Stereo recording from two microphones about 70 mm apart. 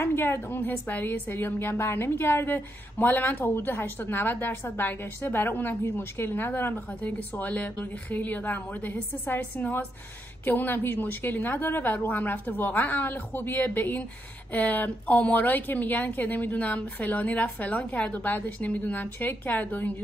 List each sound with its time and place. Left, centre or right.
0.0 s a woman's voice: left